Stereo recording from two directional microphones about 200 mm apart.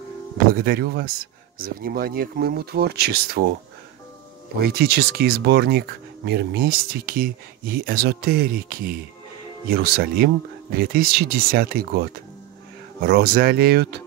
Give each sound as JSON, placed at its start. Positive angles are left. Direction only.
{"t": 0.6, "sound": "speech", "side_deg": -50}
{"t": 4.6, "sound": "speech", "side_deg": -50}